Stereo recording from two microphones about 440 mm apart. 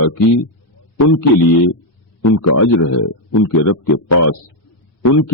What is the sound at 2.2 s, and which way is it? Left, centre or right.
A man's voice, left.